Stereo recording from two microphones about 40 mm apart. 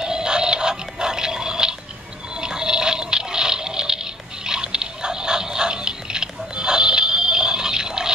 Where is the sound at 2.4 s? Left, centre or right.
Centre.